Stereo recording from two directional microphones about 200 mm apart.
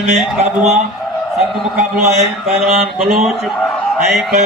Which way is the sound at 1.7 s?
35° right (ahead or behind).